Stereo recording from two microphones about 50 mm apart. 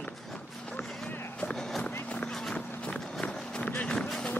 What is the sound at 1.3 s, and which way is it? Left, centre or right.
Music, left.